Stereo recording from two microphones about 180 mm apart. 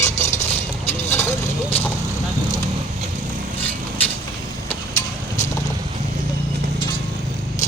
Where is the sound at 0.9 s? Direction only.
10° left (ahead or behind).